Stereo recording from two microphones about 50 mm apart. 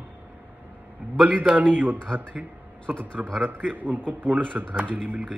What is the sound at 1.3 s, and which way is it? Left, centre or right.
A man's voice, right.